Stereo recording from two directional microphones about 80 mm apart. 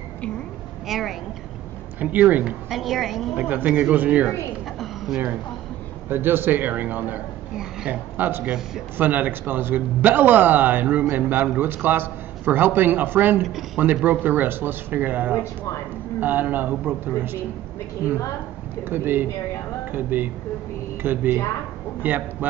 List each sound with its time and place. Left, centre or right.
0.8 s a woman's voice: centre
2.0 s a man's voice: right
2.7 s a woman's voice: centre
3.3 s a man's voice: right
4.7 s a sound: centre
6.0 s a man's voice: right
8.2 s a man's voice: right
8.5 s a man's voice: centre
8.9 s a man's voice: right
13.4 s a woman's voice: centre
13.7 s a man's voice: right
18.9 s a man's voice: right